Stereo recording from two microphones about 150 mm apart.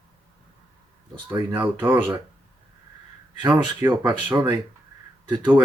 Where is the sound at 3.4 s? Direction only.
30° right (ahead or behind).